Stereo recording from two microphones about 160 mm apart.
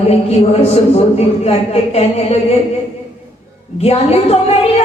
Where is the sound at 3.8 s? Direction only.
40° left (ahead or behind).